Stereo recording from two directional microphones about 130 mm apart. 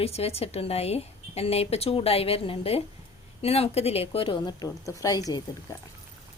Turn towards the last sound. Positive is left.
turn(degrees=30)  # may be behind; listen again after turning